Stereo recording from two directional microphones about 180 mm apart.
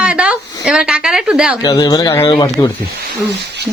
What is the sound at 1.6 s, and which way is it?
Speech, 20° left (ahead or behind).